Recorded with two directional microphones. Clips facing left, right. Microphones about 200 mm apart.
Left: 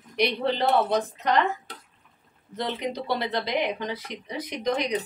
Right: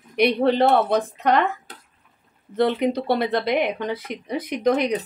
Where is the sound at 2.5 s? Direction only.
60° right (ahead or behind).